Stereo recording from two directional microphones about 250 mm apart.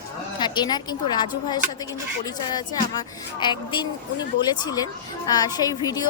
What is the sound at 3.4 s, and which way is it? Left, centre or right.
A woman's voice, centre.